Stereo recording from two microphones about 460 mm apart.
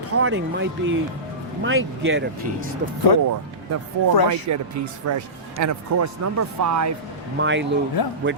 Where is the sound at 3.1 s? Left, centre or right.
Left.